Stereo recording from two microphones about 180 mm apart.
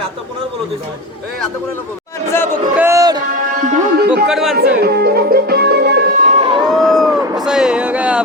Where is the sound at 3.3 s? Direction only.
45° right (ahead or behind).